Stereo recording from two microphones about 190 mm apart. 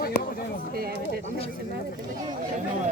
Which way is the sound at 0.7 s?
55° right (ahead or behind).